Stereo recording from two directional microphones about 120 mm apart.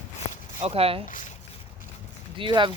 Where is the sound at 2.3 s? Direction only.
45° right (ahead or behind).